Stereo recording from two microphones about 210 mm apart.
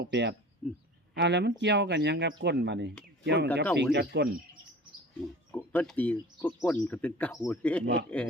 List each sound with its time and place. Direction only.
0.0 s speech: 55° right (ahead or behind)
0.6 s speech: centre (ahead or behind)
1.1 s speech: 55° right (ahead or behind)
5.5 s speech: 10° left (ahead or behind)